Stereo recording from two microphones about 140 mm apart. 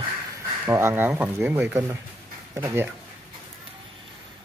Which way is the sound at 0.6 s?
15° right (ahead or behind).